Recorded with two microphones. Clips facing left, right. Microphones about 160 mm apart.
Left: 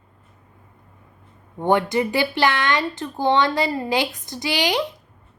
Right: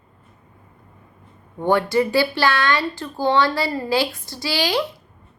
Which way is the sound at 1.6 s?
20° left (ahead or behind).